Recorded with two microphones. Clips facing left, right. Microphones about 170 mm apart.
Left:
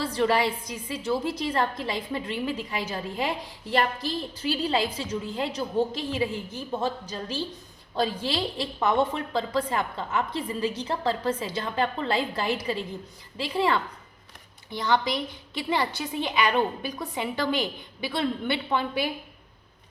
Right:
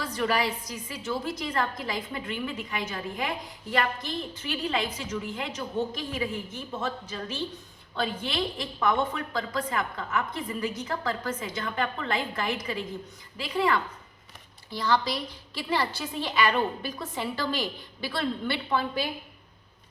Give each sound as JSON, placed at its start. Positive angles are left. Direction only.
{"t": 0.0, "sound": "a woman's voice", "side_deg": 30}
{"t": 14.7, "sound": "a woman's voice", "side_deg": 20}